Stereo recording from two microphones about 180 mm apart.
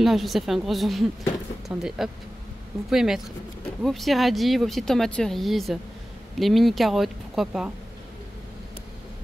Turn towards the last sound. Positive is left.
turn(degrees=0)  # may be behind; listen again after turning